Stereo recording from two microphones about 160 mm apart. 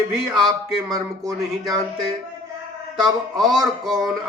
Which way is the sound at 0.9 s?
25° right (ahead or behind).